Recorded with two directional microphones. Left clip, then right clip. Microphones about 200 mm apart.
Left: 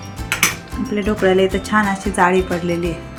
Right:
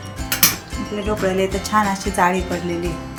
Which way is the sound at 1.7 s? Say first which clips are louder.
Left 1 dB; 20° left (ahead or behind).